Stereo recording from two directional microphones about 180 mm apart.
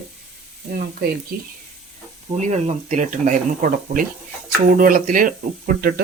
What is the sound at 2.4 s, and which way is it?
Speech, 40° right (ahead or behind).